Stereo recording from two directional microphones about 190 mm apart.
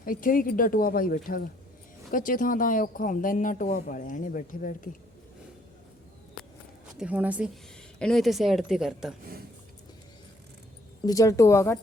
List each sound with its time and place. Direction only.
0.0 s speech: 45° left (ahead or behind)
7.0 s speech: 5° right (ahead or behind)
7.9 s speech: 5° left (ahead or behind)
11.0 s speech: 20° left (ahead or behind)